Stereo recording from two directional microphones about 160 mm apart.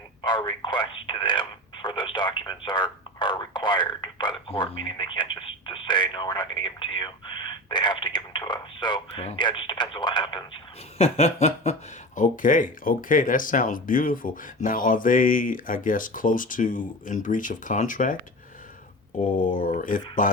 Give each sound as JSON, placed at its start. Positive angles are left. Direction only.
{"t": 0.2, "sound": "speech", "side_deg": 25}
{"t": 10.9, "sound": "speech", "side_deg": 40}
{"t": 19.4, "sound": "speech", "side_deg": 60}